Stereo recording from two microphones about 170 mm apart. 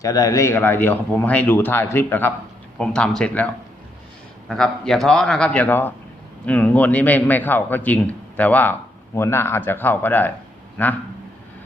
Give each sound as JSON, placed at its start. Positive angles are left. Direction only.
{"t": 0.0, "sound": "a man's voice", "side_deg": 20}